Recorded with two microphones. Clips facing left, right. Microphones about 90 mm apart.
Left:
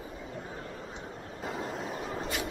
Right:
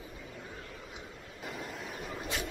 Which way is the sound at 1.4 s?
40° left (ahead or behind).